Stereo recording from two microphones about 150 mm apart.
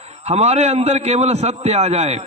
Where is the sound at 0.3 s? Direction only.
45° right (ahead or behind).